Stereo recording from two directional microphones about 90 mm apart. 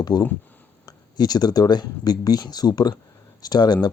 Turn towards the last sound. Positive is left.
turn(degrees=50)  # may be behind; listen again after turning